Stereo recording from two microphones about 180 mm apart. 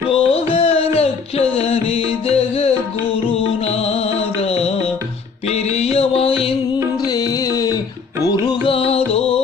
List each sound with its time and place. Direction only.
0.1 s music: 35° left (ahead or behind)